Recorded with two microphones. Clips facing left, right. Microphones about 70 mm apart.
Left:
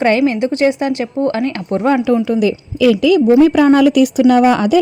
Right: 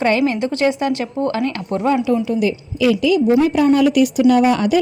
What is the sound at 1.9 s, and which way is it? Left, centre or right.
A woman's voice, left.